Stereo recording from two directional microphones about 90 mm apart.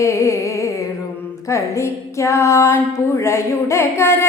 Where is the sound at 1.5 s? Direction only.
35° left (ahead or behind).